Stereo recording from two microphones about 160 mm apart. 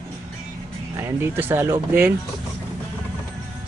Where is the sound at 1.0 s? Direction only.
15° right (ahead or behind).